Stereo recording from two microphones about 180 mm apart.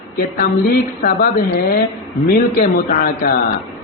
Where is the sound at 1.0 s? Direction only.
55° left (ahead or behind).